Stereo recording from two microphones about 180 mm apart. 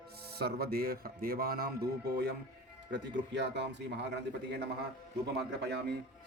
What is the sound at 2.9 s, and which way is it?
A man's voice, 75° right (ahead or behind).